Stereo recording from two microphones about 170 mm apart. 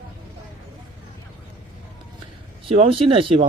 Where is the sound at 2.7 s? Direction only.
35° right (ahead or behind).